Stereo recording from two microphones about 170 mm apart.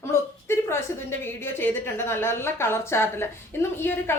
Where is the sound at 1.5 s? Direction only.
15° left (ahead or behind).